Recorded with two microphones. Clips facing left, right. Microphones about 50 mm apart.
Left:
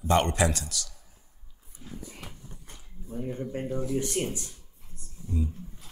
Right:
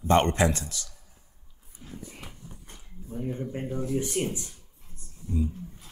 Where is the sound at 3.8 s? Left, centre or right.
Right.